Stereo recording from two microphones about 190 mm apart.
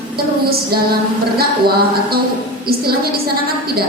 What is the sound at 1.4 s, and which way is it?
A woman's voice, 55° right (ahead or behind).